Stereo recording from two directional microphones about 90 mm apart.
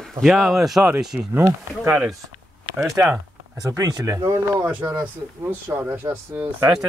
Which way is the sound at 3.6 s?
40° right (ahead or behind).